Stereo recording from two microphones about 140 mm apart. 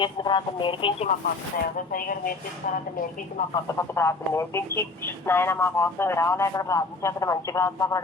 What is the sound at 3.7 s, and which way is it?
Speech, 20° left (ahead or behind).